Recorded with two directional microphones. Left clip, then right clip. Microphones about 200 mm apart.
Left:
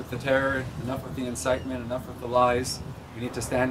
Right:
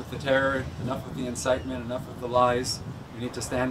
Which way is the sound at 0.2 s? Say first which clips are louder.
Even; 10° left (ahead or behind).